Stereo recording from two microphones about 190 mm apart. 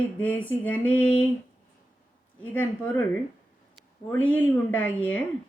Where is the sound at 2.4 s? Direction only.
10° left (ahead or behind).